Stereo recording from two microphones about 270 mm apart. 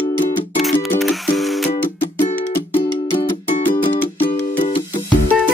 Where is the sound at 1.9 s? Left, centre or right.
Left.